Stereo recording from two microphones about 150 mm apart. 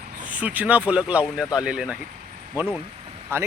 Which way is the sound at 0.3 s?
10° right (ahead or behind).